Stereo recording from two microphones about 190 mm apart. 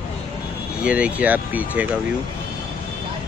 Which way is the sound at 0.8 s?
5° right (ahead or behind).